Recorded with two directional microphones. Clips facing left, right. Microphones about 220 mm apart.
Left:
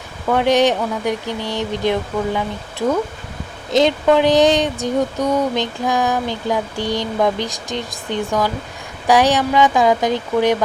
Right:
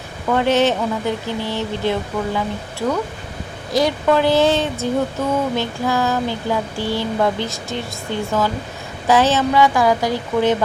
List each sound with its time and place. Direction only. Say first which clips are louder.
0.3 s speech: left 1 dB; 15° left (ahead or behind)